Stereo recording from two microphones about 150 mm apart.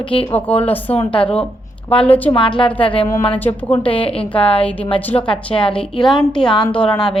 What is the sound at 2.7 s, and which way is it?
A woman's voice, 10° left (ahead or behind).